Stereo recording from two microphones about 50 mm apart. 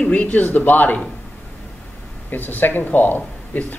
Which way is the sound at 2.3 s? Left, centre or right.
Left.